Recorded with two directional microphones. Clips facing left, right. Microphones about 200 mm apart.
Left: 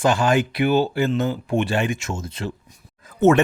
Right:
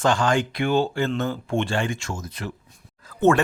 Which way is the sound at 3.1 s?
20° left (ahead or behind).